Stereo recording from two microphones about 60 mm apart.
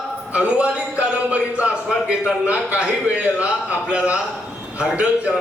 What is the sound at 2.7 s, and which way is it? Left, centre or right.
Speech, right.